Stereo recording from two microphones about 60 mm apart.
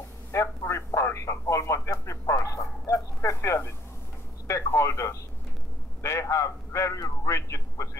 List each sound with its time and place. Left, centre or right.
0.3 s a man's voice: left
2.4 s a sound: left
4.5 s a man's voice: left